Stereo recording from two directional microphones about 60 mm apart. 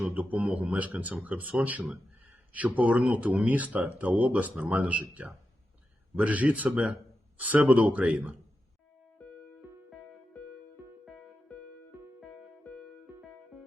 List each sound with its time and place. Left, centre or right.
0.1 s speech: right
0.4 s speech: centre
6.1 s speech: right